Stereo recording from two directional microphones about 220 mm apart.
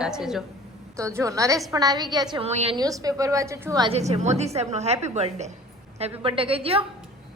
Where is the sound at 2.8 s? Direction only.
15° right (ahead or behind).